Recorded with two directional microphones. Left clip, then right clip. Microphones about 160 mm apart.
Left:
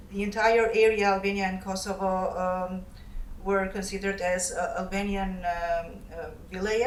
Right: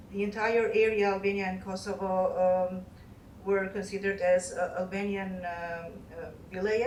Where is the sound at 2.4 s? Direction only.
45° left (ahead or behind).